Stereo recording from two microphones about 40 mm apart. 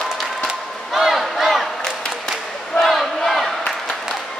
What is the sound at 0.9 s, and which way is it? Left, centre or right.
Crowd, centre.